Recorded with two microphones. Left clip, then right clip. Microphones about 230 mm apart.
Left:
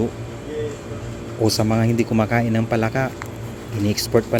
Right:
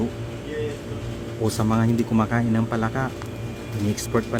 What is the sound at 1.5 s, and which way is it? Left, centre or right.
Speech, centre.